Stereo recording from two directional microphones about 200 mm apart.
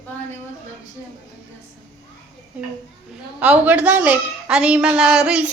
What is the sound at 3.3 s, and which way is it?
A woman's voice, 5° right (ahead or behind).